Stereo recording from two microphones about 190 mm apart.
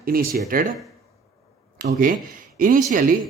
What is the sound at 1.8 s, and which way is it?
Speech, 45° right (ahead or behind).